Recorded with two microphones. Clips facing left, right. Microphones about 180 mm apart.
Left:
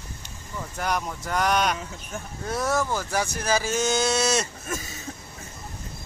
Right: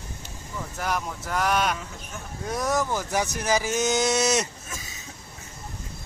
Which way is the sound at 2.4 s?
15° right (ahead or behind).